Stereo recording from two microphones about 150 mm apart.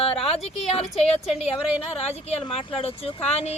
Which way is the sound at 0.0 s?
40° left (ahead or behind).